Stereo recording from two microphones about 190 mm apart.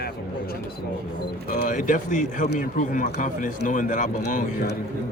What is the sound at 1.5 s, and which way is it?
A man's voice, 45° left (ahead or behind).